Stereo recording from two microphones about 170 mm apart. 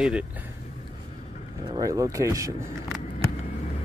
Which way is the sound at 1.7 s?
20° right (ahead or behind).